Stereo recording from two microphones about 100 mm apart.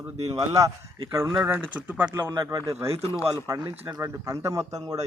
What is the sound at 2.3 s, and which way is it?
A man's voice, 35° right (ahead or behind).